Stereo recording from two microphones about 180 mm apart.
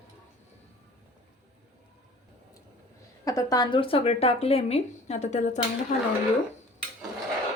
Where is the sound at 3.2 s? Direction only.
20° left (ahead or behind); by 5.6 s 40° left (ahead or behind).